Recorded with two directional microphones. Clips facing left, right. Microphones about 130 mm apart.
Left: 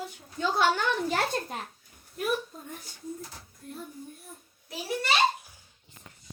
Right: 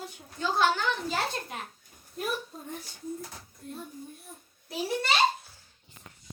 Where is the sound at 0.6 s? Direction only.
55° left (ahead or behind).